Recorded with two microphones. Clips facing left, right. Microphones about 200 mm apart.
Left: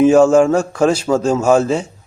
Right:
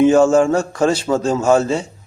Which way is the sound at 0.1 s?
5° left (ahead or behind).